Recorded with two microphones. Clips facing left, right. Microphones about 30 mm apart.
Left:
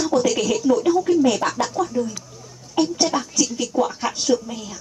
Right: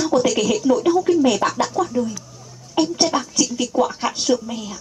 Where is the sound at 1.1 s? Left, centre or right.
Right.